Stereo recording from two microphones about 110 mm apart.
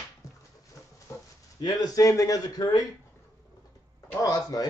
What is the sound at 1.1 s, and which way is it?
Dog, 25° left (ahead or behind).